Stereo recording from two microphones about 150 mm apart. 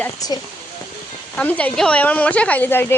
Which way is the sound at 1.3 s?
10° left (ahead or behind).